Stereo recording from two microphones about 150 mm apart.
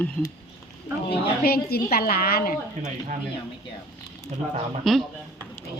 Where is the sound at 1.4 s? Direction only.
90° left.